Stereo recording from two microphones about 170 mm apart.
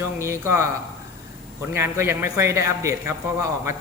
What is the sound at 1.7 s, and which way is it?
A man's voice, 15° right (ahead or behind).